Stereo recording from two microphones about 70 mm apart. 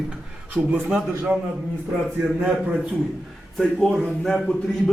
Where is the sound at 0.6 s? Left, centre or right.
Right.